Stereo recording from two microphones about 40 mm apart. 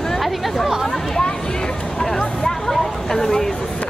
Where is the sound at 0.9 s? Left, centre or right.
Centre.